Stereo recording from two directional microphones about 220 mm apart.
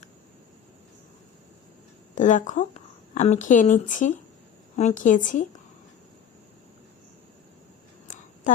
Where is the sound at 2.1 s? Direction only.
35° left (ahead or behind).